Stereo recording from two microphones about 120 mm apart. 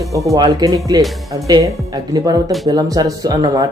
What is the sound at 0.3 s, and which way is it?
Speech, 30° right (ahead or behind).